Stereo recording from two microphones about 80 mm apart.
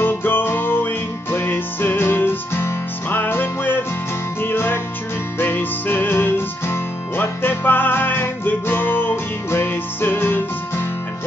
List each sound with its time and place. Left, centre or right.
0.0 s music: left